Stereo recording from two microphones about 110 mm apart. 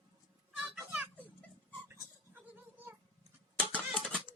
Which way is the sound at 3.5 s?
10° left (ahead or behind).